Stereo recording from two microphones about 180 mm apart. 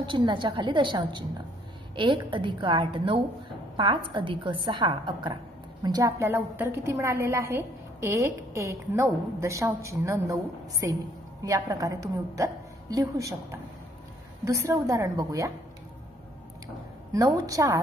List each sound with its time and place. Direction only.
0.0 s a woman's voice: 25° right (ahead or behind)
17.1 s a woman's voice: 20° right (ahead or behind)